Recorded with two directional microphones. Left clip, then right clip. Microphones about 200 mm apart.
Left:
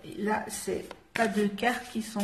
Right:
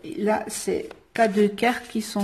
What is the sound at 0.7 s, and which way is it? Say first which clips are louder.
Speech: right 8 dB; 45° right (ahead or behind).